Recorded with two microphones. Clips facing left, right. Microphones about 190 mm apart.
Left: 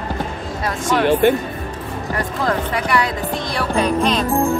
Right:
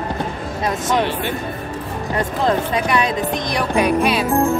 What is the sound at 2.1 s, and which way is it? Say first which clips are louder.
Speech: right 3 dB; 20° right (ahead or behind).